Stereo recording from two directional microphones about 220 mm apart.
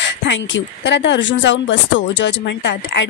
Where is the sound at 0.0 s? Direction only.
55° left (ahead or behind).